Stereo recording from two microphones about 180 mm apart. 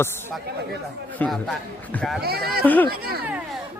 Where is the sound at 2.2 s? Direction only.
60° right (ahead or behind).